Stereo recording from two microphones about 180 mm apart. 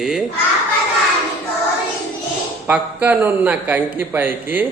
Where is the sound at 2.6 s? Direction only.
10° right (ahead or behind).